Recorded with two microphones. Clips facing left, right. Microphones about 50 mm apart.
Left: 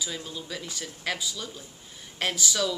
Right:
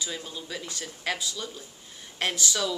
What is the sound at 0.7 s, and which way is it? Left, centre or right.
Speech, centre.